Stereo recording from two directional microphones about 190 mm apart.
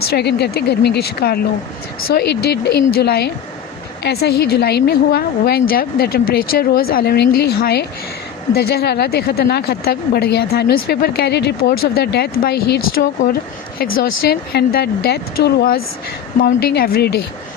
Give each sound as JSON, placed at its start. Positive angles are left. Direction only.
{"t": 0.0, "sound": "a woman's voice", "side_deg": 55}